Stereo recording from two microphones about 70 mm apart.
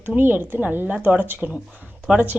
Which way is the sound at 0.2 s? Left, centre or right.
Right.